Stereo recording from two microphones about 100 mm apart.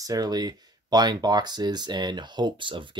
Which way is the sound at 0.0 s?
40° right (ahead or behind).